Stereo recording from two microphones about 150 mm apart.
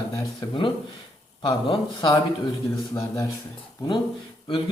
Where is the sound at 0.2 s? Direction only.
30° left (ahead or behind).